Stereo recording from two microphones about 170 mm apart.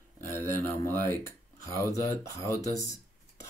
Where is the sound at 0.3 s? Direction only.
15° left (ahead or behind).